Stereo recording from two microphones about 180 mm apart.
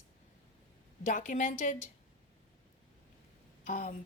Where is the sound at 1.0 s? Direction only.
45° left (ahead or behind).